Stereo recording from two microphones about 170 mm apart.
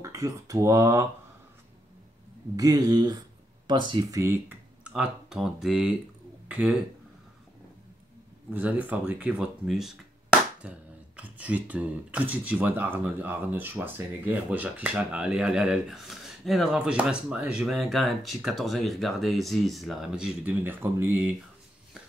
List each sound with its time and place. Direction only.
0.0 s speech: 20° right (ahead or behind)
2.5 s speech: 20° right (ahead or behind)
4.2 s speech: 10° right (ahead or behind)
8.5 s speech: 10° right (ahead or behind)